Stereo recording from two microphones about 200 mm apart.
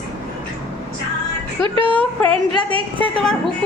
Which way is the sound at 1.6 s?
25° right (ahead or behind).